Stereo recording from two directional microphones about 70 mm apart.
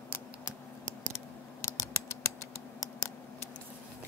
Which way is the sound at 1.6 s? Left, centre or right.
Left.